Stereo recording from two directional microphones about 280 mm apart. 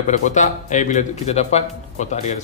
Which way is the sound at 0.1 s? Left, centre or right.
Left.